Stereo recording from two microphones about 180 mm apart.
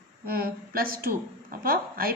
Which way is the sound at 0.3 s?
55° right (ahead or behind).